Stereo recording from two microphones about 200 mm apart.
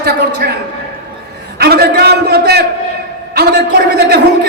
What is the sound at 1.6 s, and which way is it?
A man's voice, 50° right (ahead or behind).